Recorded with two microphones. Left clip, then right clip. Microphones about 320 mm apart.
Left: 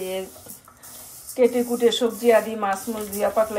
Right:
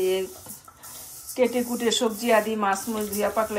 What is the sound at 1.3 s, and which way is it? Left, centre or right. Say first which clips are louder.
Speech: left 4 dB; centre.